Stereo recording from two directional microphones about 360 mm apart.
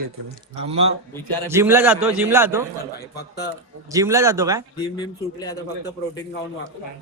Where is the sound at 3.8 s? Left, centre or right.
Centre.